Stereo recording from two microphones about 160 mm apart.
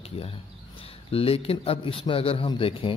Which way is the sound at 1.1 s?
35° left (ahead or behind).